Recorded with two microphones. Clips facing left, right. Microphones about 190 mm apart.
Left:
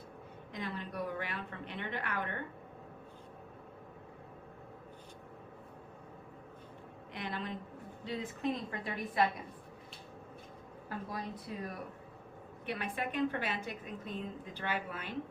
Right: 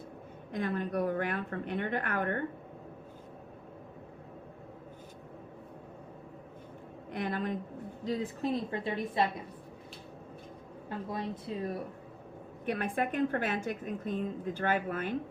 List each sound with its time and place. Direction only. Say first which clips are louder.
0.5 s a woman's voice: right 8 dB; 50° right (ahead or behind)
7.1 s speech: right 7 dB; 45° right (ahead or behind)
8.0 s a woman's voice: right 4 dB; 35° right (ahead or behind)
10.8 s a woman's voice: right 5 dB; 25° right (ahead or behind)
12.6 s a woman's voice: right 6 dB; 45° right (ahead or behind)